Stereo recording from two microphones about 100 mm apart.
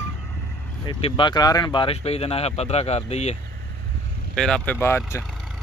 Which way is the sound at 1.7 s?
80° left.